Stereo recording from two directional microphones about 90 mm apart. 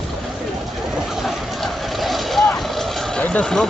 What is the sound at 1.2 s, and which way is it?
Vehicle, centre (ahead or behind).